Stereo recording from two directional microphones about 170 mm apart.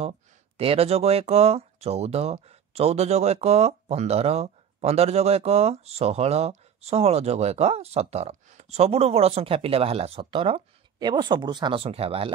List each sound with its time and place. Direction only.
0.6 s speech: 35° right (ahead or behind)